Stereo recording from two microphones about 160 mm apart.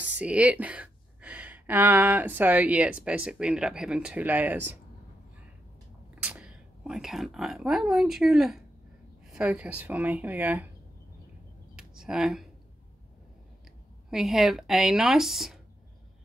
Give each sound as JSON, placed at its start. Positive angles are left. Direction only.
{"t": 0.2, "sound": "speech", "side_deg": -5}
{"t": 6.1, "sound": "speech", "side_deg": -5}
{"t": 11.7, "sound": "a sound", "side_deg": -5}
{"t": 14.1, "sound": "speech", "side_deg": 0}